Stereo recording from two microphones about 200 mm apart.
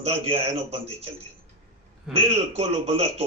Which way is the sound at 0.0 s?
30° right (ahead or behind).